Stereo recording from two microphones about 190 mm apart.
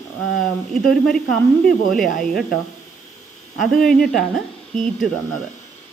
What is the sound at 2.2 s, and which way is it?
Speech, centre (ahead or behind).